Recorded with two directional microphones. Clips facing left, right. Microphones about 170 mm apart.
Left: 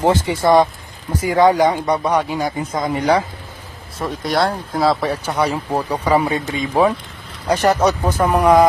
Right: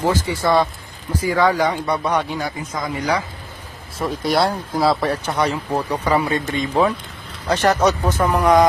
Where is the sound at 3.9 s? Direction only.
Centre (ahead or behind).